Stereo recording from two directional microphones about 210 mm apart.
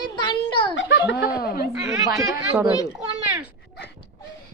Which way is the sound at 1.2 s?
45° left (ahead or behind).